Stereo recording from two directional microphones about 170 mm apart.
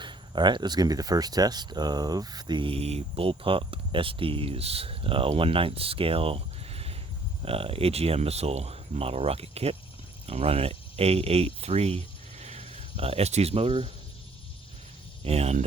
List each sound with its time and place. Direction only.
0.0 s speech: 25° right (ahead or behind)
15.2 s speech: 35° right (ahead or behind)